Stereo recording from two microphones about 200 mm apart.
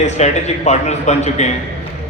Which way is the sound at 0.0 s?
35° left (ahead or behind).